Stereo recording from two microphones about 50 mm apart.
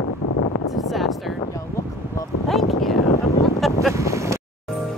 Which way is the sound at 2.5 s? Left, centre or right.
Centre.